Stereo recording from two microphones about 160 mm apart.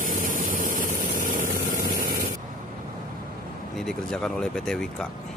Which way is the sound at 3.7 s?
5° left (ahead or behind).